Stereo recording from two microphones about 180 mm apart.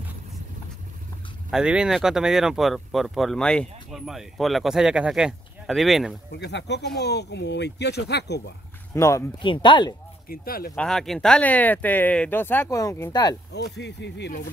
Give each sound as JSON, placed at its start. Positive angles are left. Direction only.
{"t": 1.5, "sound": "speech", "side_deg": -5}
{"t": 6.3, "sound": "speech", "side_deg": 70}
{"t": 8.9, "sound": "speech", "side_deg": 15}
{"t": 9.4, "sound": "speech", "side_deg": 25}
{"t": 10.2, "sound": "speech", "side_deg": 55}
{"t": 10.7, "sound": "speech", "side_deg": 5}
{"t": 13.5, "sound": "speech", "side_deg": 70}